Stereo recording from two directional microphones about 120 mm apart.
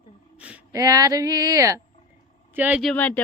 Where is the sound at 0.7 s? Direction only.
30° right (ahead or behind).